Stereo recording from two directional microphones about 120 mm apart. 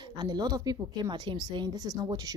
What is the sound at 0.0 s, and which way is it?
A woman's voice, 40° right (ahead or behind).